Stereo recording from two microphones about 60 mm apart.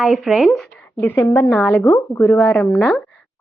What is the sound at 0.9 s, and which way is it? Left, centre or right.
Speech, left.